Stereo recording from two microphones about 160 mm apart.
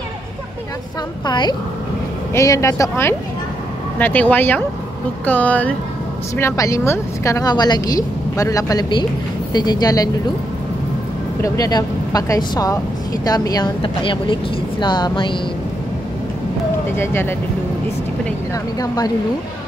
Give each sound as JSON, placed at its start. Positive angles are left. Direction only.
{"t": 1.2, "sound": "a woman's voice", "side_deg": 30}
{"t": 11.4, "sound": "a woman's voice", "side_deg": 20}
{"t": 16.9, "sound": "speech", "side_deg": 15}
{"t": 18.5, "sound": "a woman's voice", "side_deg": 25}